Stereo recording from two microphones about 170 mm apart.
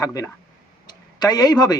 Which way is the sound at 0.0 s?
20° left (ahead or behind).